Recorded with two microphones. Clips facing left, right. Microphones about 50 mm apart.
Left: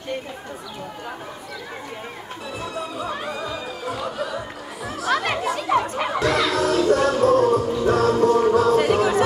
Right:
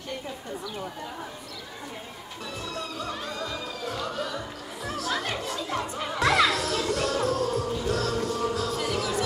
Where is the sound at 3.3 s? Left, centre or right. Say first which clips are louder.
Left 4 dB; centre.